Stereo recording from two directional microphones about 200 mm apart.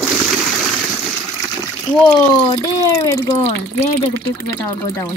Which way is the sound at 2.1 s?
20° left (ahead or behind).